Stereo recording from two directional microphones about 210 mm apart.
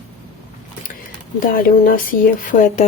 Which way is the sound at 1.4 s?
40° left (ahead or behind).